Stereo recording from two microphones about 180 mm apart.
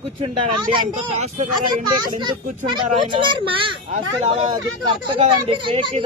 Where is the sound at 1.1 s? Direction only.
35° right (ahead or behind).